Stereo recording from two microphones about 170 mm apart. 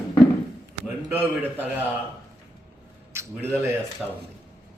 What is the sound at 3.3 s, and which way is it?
Speech, 10° right (ahead or behind).